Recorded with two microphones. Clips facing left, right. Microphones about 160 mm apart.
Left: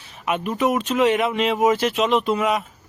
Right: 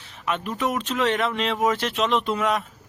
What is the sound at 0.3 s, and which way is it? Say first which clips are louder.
A man's voice: left 5 dB; 15° left (ahead or behind).